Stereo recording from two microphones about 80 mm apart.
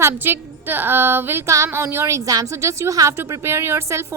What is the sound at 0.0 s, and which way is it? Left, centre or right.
A woman's voice, right.